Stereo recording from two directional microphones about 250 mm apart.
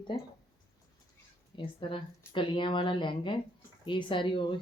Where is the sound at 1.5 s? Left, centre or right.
Centre.